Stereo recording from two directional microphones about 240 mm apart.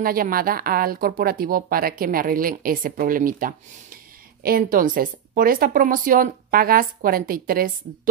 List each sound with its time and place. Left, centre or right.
0.0 s speech: right